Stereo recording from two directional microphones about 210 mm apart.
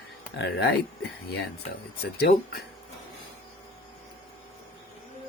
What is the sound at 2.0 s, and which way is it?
Speech, 50° left (ahead or behind).